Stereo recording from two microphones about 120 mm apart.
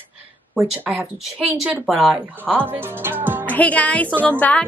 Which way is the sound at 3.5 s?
15° left (ahead or behind).